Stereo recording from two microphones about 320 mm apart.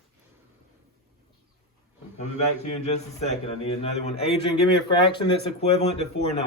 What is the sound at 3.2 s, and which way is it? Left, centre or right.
A man's voice, centre.